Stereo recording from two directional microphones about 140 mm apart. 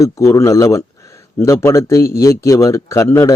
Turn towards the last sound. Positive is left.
turn(degrees=25)  # may be behind; listen again after turning